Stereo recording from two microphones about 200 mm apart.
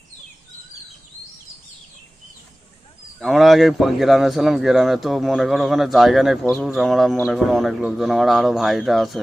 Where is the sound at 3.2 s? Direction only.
Centre (ahead or behind).